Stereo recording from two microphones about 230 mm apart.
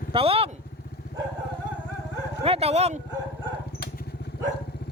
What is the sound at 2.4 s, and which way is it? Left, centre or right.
Bow-wow, right.